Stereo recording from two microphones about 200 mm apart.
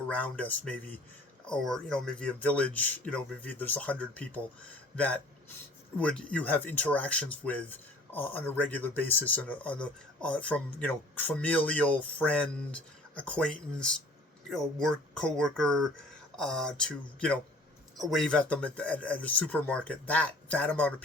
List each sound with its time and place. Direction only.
0.1 s speech: 5° left (ahead or behind)